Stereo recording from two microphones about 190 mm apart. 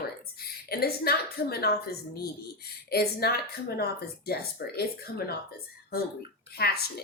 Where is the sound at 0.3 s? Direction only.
55° left (ahead or behind).